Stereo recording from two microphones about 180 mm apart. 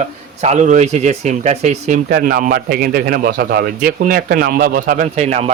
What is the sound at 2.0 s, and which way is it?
Speech, 60° right (ahead or behind).